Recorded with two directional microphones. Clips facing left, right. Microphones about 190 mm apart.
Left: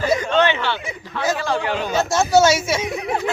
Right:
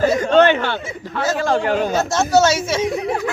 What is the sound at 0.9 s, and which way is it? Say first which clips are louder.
Speech: right 1 dB; 15° left (ahead or behind).